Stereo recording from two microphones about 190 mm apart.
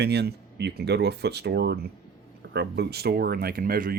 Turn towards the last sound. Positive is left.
turn(degrees=-50)  # may be behind; listen again after turning